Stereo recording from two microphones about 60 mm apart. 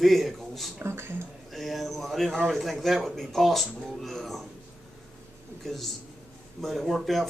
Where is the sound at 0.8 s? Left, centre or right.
Right.